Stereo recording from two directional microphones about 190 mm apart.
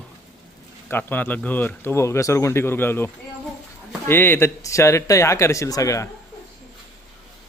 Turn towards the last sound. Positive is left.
turn(degrees=15)  # may be behind; listen again after turning